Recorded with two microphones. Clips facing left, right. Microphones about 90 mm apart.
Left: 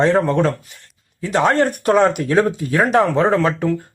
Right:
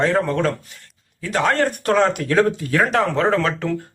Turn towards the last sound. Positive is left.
turn(degrees=20)  # may be behind; listen again after turning